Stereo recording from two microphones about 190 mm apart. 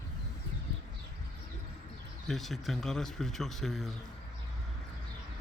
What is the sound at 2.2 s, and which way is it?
Speech, centre (ahead or behind).